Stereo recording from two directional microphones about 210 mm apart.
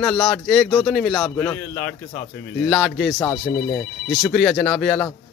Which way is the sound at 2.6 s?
Centre (ahead or behind).